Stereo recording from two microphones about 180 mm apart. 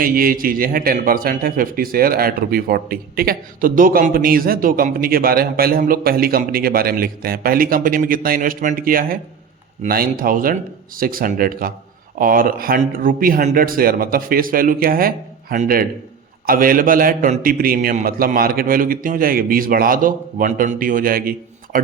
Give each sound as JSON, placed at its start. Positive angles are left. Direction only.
{"t": 0.0, "sound": "a man's voice", "side_deg": -55}